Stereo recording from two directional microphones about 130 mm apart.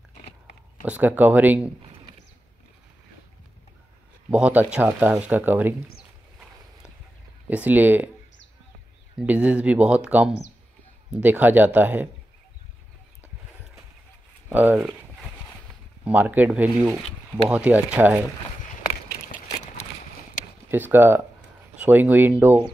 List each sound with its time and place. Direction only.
0.8 s speech: 15° right (ahead or behind)
4.3 s speech: 10° right (ahead or behind)
7.4 s speech: 15° right (ahead or behind)
9.2 s speech: 10° right (ahead or behind)
14.5 s speech: 15° right (ahead or behind)
16.0 s speech: 10° right (ahead or behind)
20.6 s speech: 15° right (ahead or behind)